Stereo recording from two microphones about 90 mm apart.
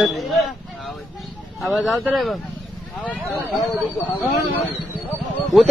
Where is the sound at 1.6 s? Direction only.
Centre (ahead or behind).